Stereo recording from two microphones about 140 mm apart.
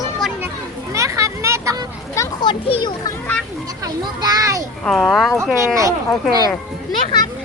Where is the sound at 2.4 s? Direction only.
35° left (ahead or behind).